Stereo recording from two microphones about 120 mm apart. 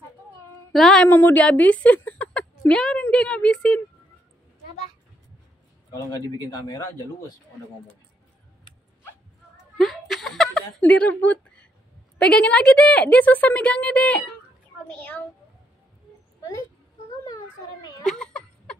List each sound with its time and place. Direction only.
0.7 s speech: 5° left (ahead or behind)
1.0 s speech: 15° left (ahead or behind)
5.9 s a man's voice: 30° left (ahead or behind)
9.8 s a sound: centre (ahead or behind)
12.2 s speech: 5° left (ahead or behind)
18.0 s a sound: 5° left (ahead or behind)